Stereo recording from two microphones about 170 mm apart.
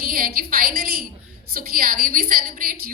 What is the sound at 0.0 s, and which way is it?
A woman's voice, 55° right (ahead or behind).